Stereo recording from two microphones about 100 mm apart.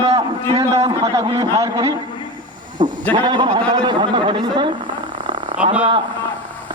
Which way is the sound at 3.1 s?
50° right (ahead or behind).